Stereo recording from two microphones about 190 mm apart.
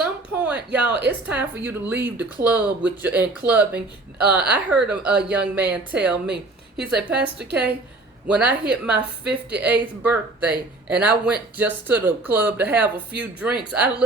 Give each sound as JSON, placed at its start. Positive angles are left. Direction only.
{"t": 0.3, "sound": "a sound", "side_deg": -5}
{"t": 1.3, "sound": "speech", "side_deg": -10}
{"t": 6.9, "sound": "a woman's voice", "side_deg": -60}
{"t": 8.3, "sound": "speech", "side_deg": -5}